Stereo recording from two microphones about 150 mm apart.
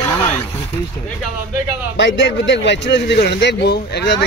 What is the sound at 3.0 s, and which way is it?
A man's voice, 90° left.